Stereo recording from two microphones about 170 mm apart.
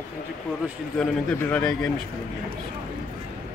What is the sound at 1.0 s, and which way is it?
Speech, 5° left (ahead or behind).